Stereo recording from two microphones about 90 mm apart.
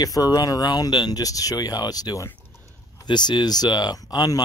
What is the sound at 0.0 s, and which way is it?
Speech, 45° left (ahead or behind).